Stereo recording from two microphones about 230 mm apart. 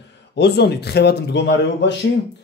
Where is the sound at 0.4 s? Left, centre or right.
Left.